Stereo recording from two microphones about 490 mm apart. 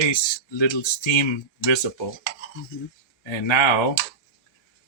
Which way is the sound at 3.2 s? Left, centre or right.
Left.